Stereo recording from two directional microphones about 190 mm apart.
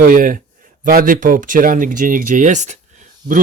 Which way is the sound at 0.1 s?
45° right (ahead or behind).